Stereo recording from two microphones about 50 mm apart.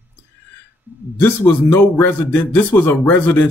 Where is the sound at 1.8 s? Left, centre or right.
Left.